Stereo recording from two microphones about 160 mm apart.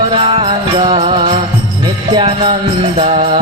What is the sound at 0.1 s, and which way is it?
Music, 35° right (ahead or behind).